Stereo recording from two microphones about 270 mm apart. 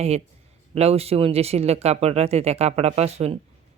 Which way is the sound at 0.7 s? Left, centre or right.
Right.